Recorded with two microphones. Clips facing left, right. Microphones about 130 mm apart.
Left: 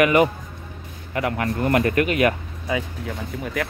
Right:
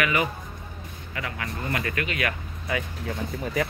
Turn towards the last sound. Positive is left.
turn(degrees=0)  # may be behind; listen again after turning